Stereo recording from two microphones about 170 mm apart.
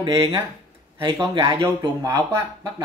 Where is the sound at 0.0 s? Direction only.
30° right (ahead or behind).